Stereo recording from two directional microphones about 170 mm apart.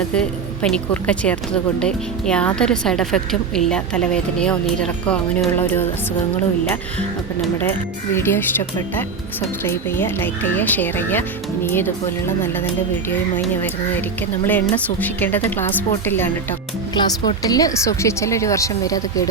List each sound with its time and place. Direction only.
0.1 s a woman's voice: 5° left (ahead or behind)
7.6 s speech: 15° left (ahead or behind)
16.9 s speech: 25° left (ahead or behind)